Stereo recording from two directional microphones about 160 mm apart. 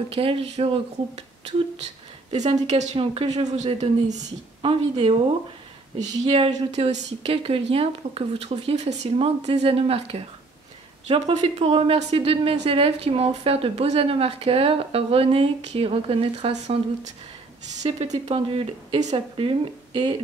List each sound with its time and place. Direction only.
0.1 s speech: 35° right (ahead or behind)
6.3 s speech: 35° right (ahead or behind)
11.3 s speech: 40° right (ahead or behind)